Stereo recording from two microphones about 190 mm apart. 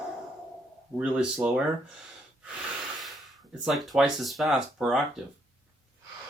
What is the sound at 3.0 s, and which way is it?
Speech, centre (ahead or behind).